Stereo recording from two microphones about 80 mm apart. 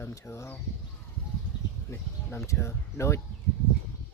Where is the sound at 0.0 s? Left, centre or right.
Left.